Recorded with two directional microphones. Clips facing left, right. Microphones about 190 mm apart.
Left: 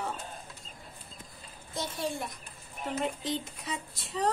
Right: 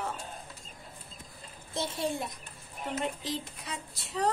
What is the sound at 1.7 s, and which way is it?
Speech, 25° right (ahead or behind).